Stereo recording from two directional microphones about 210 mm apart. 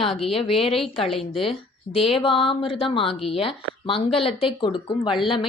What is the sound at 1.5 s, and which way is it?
A woman's voice, 25° left (ahead or behind).